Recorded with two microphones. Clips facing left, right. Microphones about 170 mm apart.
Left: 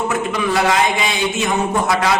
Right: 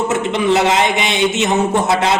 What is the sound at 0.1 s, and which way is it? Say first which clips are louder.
A man's voice: right 4 dB; 25° right (ahead or behind).